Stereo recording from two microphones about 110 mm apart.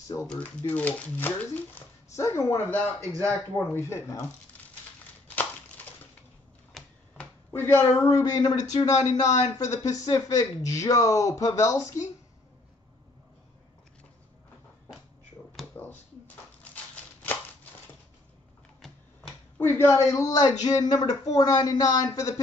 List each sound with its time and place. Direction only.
0.3 s speech: 15° left (ahead or behind)
6.8 s typewriter: centre (ahead or behind)
7.5 s speech: 20° left (ahead or behind)
15.7 s a sound: 20° left (ahead or behind)
19.6 s speech: 25° left (ahead or behind)